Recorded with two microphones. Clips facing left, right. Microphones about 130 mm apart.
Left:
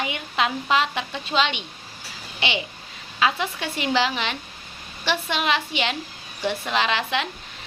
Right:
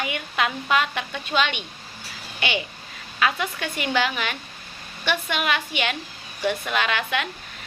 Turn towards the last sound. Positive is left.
turn(degrees=25)  # may be behind; listen again after turning